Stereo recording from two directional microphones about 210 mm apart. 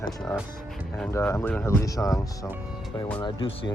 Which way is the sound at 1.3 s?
10° left (ahead or behind).